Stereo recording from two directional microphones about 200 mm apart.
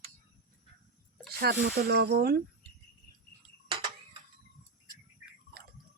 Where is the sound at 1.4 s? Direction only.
50° right (ahead or behind).